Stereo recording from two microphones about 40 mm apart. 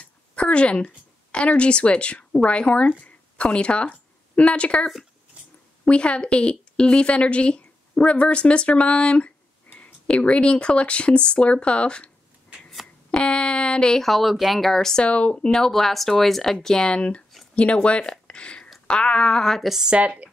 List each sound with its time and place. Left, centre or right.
0.4 s a woman's voice: left
5.9 s a woman's voice: left
13.2 s a sound: left
14.0 s speech: centre
15.0 s speech: left
15.3 s speech: centre
16.6 s speech: centre
17.6 s a woman's voice: left
19.6 s a woman's voice: centre
19.9 s speech: right